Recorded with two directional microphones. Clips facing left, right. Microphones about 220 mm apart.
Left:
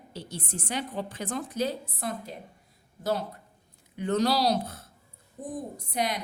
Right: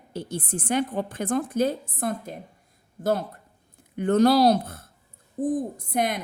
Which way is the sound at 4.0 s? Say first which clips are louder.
Right 7 dB; 55° right (ahead or behind).